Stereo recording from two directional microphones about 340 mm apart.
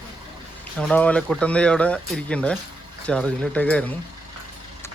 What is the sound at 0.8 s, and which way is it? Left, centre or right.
Speech, centre.